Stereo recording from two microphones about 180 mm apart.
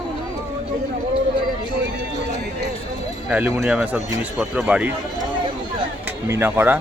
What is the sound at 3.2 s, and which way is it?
Speech, 5° right (ahead or behind).